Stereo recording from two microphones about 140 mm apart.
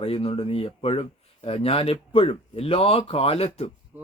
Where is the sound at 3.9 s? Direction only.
15° right (ahead or behind).